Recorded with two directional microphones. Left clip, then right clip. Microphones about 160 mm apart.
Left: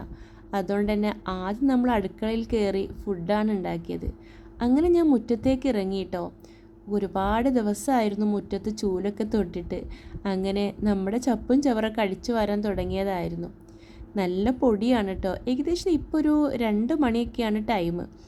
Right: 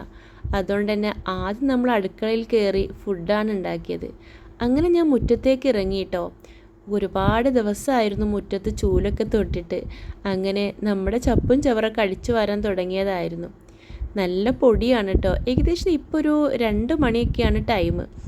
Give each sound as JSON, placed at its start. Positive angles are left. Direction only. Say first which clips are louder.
{"t": 0.5, "sound": "a woman's voice", "louder": "right 3 dB", "side_deg": -10}